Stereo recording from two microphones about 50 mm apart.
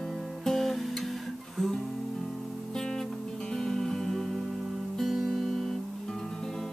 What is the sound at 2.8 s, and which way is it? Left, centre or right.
Music, centre.